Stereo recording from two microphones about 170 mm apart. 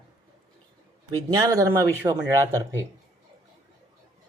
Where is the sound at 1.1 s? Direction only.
20° right (ahead or behind).